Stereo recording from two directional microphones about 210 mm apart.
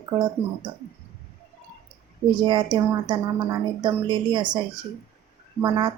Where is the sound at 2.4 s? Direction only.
20° right (ahead or behind).